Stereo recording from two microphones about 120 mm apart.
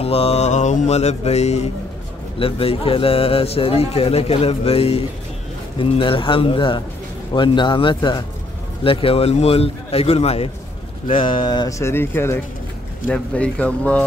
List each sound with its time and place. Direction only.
0.0 s a man's voice: 55° left (ahead or behind)
2.3 s speech: 50° left (ahead or behind)
8.8 s a man's voice: 50° left (ahead or behind)
11.8 s speech: 20° left (ahead or behind)